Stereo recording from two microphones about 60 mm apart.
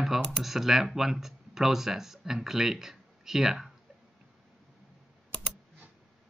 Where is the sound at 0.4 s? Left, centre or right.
Centre.